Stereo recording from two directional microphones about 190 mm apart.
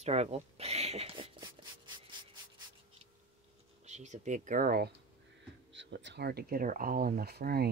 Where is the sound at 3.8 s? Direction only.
40° right (ahead or behind).